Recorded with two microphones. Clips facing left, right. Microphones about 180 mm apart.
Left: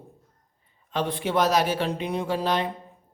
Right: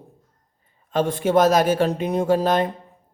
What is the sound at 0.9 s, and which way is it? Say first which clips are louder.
Speech: right 7 dB; 45° right (ahead or behind).